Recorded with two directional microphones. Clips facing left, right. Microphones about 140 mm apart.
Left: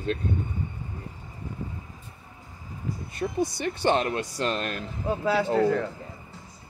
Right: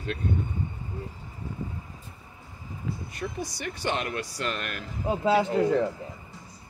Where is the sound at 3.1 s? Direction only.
25° left (ahead or behind).